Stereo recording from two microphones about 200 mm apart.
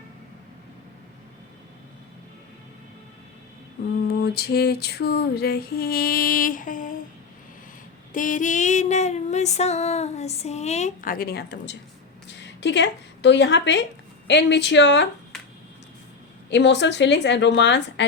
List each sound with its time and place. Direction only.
4.2 s female singing: 50° left (ahead or behind)
8.1 s female singing: 40° left (ahead or behind); by 11.8 s 55° left (ahead or behind)
12.3 s a sound: 60° left (ahead or behind)
14.3 s a woman's voice: 60° left (ahead or behind)
16.5 s a woman's voice: 60° left (ahead or behind)